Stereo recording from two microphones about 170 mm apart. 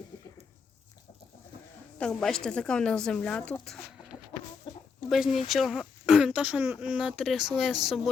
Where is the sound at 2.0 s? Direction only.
5° left (ahead or behind).